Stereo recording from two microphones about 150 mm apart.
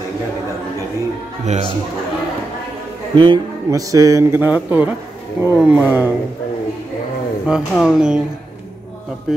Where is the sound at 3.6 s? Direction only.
20° right (ahead or behind).